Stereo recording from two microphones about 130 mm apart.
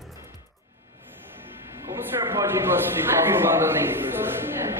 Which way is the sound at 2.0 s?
25° right (ahead or behind).